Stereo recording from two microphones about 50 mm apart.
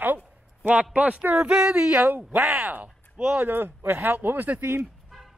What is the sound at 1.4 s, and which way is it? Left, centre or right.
Female singing, centre.